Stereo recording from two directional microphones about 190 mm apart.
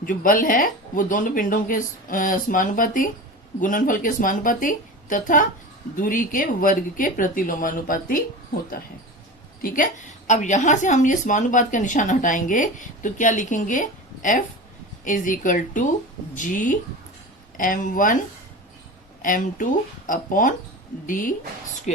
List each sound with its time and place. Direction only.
0.0 s a woman's voice: 45° left (ahead or behind)
9.6 s a woman's voice: 45° left (ahead or behind)
19.2 s a woman's voice: 45° left (ahead or behind)